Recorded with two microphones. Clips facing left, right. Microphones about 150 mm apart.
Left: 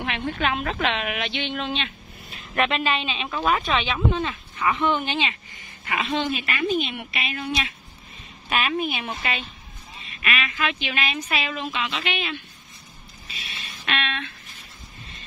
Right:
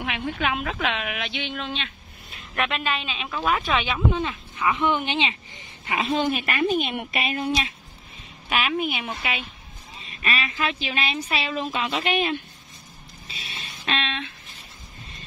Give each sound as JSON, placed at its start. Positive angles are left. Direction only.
{"t": 0.0, "sound": "a woman's voice", "side_deg": -5}
{"t": 5.9, "sound": "a woman's voice", "side_deg": -40}
{"t": 8.5, "sound": "a woman's voice", "side_deg": -10}
{"t": 10.0, "sound": "a woman's voice", "side_deg": -35}
{"t": 11.7, "sound": "a woman's voice", "side_deg": -40}
{"t": 13.6, "sound": "a sound", "side_deg": -30}